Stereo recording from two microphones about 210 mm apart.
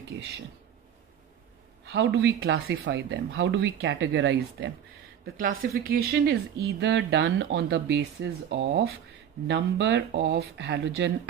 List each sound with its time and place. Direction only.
1.9 s speech: 55° right (ahead or behind)
5.2 s a woman's voice: 40° right (ahead or behind)